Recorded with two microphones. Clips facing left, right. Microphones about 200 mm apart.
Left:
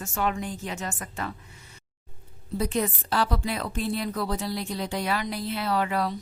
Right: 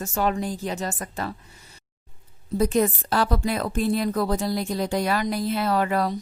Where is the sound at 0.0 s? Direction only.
40° right (ahead or behind).